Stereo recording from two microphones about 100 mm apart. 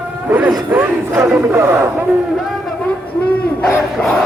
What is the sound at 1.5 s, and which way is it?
Speech, 25° right (ahead or behind).